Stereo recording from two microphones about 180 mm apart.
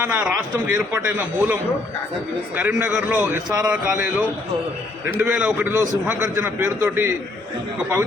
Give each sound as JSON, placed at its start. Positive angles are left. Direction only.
{"t": 0.1, "sound": "a man's voice", "side_deg": -10}
{"t": 2.6, "sound": "a man's voice", "side_deg": -10}
{"t": 5.1, "sound": "a man's voice", "side_deg": -10}